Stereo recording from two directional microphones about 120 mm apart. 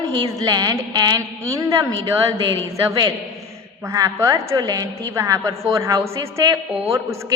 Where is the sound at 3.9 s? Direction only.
30° right (ahead or behind).